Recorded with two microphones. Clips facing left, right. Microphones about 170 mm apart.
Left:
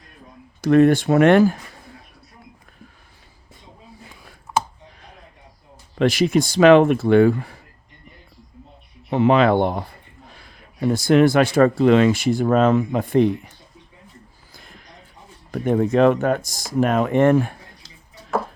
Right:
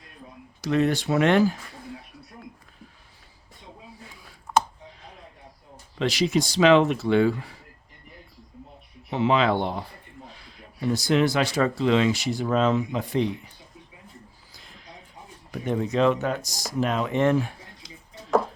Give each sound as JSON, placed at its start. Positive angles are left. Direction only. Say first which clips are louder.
{"t": 0.6, "sound": "speech", "louder": "left 9 dB", "side_deg": 50}
{"t": 6.0, "sound": "speech", "louder": "left 6 dB", "side_deg": 50}
{"t": 9.0, "sound": "speech", "louder": "left 6 dB", "side_deg": 50}
{"t": 14.5, "sound": "a sound", "louder": "left 8 dB", "side_deg": 55}
{"t": 15.5, "sound": "speech", "louder": "left 7 dB", "side_deg": 55}